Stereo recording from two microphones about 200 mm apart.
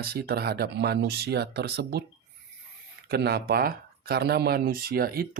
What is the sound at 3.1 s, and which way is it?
Speech, 55° right (ahead or behind).